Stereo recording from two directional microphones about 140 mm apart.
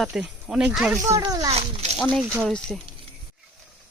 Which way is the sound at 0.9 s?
25° right (ahead or behind).